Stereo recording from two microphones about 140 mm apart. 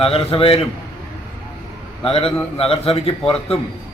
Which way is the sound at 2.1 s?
45° left (ahead or behind).